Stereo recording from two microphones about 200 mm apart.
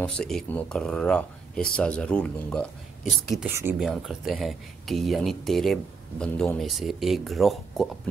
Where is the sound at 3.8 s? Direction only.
Centre (ahead or behind).